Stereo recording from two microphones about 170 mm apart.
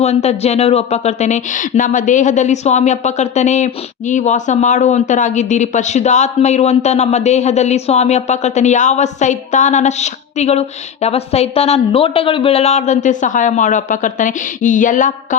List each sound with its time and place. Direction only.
0.0 s speech: 40° left (ahead or behind)